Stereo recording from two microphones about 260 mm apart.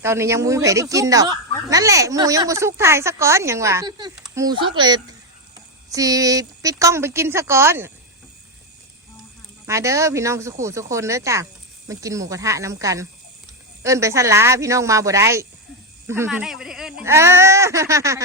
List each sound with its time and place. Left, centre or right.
0.0 s speech: centre
9.6 s speech: centre